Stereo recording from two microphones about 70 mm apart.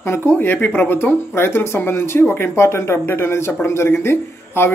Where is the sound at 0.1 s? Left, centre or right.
Left.